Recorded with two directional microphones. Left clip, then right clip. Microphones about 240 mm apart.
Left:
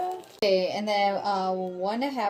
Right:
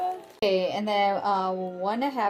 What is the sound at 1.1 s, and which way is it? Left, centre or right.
Speech, centre.